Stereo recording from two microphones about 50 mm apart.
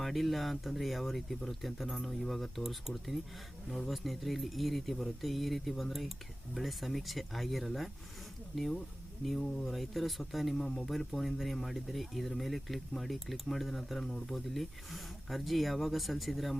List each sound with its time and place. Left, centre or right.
0.0 s speech: centre
9.4 s speech: centre
9.6 s speech: centre